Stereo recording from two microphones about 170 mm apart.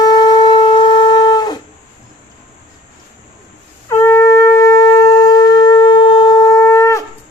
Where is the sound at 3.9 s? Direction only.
15° left (ahead or behind).